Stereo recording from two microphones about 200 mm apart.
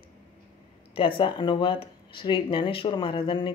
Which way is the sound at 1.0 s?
25° left (ahead or behind).